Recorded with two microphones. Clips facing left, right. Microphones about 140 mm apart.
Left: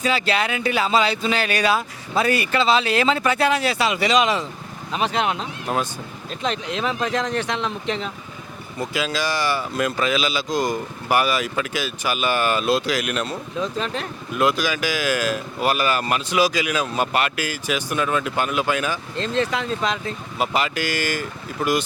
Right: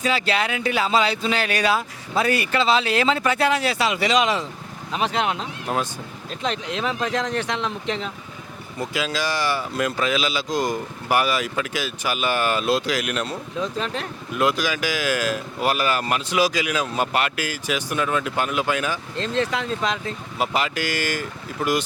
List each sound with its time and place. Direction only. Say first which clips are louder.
0.0 s speech: left 1 dB; 10° left (ahead or behind)